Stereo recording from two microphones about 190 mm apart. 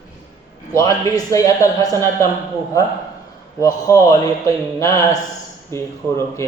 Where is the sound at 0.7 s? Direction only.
20° left (ahead or behind).